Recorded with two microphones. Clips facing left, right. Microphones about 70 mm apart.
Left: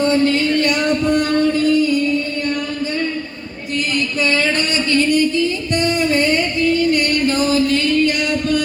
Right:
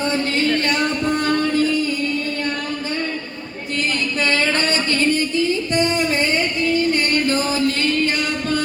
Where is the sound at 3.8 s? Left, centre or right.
Right.